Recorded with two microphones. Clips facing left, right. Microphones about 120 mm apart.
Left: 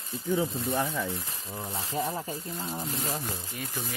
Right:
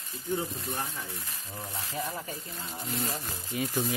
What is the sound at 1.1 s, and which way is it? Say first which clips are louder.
Speech: left 5 dB; 25° left (ahead or behind).